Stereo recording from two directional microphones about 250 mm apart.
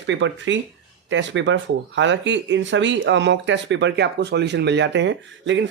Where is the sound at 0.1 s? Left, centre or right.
Right.